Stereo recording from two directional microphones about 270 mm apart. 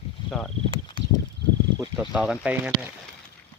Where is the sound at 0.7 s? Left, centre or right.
Centre.